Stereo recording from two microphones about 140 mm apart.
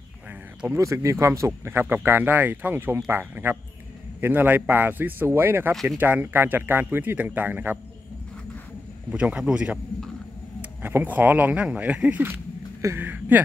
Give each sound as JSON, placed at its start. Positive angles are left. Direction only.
{"t": 0.7, "sound": "speech", "side_deg": -20}
{"t": 9.1, "sound": "speech", "side_deg": -10}
{"t": 10.8, "sound": "speech", "side_deg": -15}